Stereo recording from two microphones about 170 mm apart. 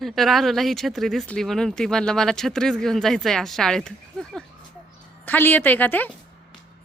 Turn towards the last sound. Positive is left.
turn(degrees=10)  # may be behind; listen again after turning